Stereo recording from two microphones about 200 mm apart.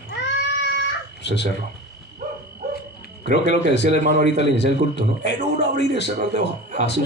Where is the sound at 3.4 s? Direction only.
60° left (ahead or behind).